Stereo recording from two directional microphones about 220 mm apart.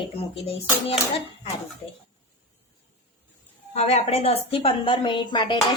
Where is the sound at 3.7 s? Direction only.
30° left (ahead or behind).